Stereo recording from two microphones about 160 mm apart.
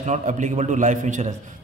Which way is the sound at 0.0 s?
45° right (ahead or behind).